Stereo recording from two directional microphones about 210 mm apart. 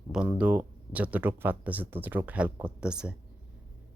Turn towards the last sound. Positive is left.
turn(degrees=-5)  # may be behind; listen again after turning